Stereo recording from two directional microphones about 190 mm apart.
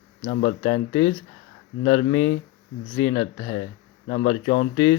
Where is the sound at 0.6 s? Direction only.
25° left (ahead or behind).